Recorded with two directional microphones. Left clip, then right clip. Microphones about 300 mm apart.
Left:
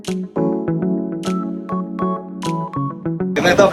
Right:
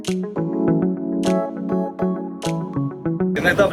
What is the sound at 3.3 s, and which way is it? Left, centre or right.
Music, centre.